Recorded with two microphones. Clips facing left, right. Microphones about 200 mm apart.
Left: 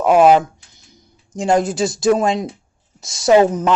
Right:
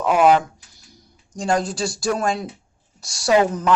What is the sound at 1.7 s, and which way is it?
Speech, 20° left (ahead or behind).